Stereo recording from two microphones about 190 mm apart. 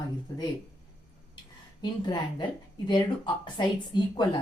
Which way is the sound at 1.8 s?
25° left (ahead or behind).